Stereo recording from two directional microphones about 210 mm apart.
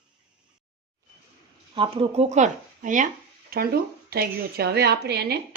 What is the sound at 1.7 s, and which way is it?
A woman's voice, 25° right (ahead or behind).